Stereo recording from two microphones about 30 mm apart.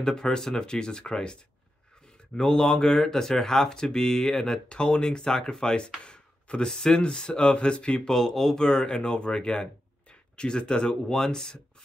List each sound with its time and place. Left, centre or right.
0.0 s speech: left
2.3 s speech: centre
4.6 s speech: left
6.0 s a sound: left
7.0 s speech: left
8.1 s speech: centre
8.5 s speech: left
11.1 s speech: centre